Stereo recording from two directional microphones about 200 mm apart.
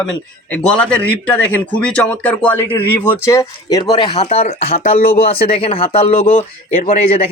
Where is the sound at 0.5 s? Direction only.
5° left (ahead or behind).